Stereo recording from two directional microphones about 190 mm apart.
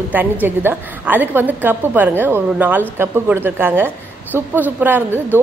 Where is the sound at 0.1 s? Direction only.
10° right (ahead or behind).